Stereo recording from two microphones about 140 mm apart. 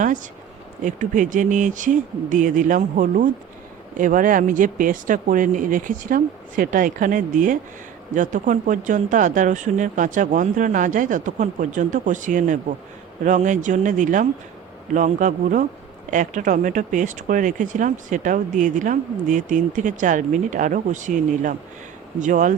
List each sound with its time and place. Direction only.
0.9 s speech: 65° right (ahead or behind)